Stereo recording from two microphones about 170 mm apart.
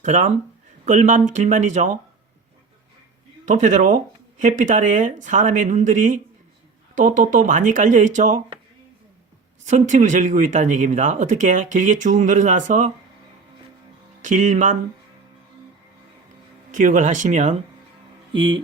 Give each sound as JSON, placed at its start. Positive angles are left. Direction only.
{"t": 0.0, "sound": "speech", "side_deg": -45}
{"t": 3.4, "sound": "speech", "side_deg": -45}
{"t": 9.6, "sound": "speech", "side_deg": -45}
{"t": 14.2, "sound": "speech", "side_deg": -45}
{"t": 16.7, "sound": "speech", "side_deg": -50}
{"t": 18.3, "sound": "speech", "side_deg": -30}